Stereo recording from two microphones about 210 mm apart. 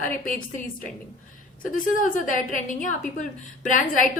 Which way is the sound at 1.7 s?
40° left (ahead or behind).